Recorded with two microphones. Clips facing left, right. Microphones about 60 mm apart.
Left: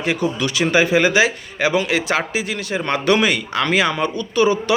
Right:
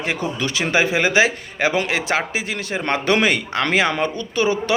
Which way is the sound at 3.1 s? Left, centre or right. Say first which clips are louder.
Even; right.